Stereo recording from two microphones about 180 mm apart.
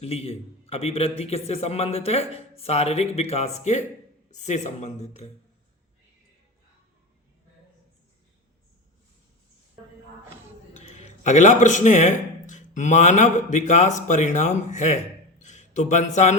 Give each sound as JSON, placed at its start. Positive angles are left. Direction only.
{"t": 0.0, "sound": "a man's voice", "side_deg": 35}
{"t": 10.8, "sound": "speech", "side_deg": 40}